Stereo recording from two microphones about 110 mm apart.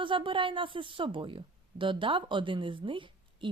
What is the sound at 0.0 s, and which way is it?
Speech, 50° right (ahead or behind).